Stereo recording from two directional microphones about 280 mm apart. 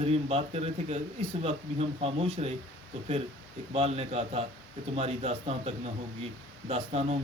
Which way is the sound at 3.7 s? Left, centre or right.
Right.